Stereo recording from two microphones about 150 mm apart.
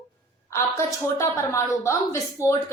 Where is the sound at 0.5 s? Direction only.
20° left (ahead or behind).